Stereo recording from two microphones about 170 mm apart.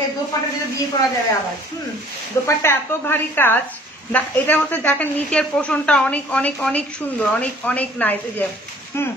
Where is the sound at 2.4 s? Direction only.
15° left (ahead or behind).